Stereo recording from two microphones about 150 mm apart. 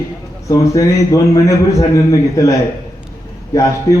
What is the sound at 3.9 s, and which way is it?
Speech, 25° left (ahead or behind).